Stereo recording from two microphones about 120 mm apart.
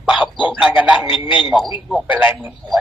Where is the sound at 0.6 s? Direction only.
10° right (ahead or behind).